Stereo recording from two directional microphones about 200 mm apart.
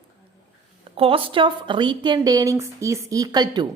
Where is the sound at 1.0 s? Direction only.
25° right (ahead or behind).